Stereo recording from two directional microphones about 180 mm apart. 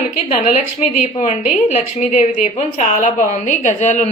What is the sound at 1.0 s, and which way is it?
A woman's voice, 40° left (ahead or behind).